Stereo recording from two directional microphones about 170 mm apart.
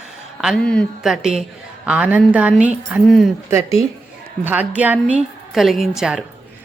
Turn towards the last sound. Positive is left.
turn(degrees=-5)  # may be behind; listen again after turning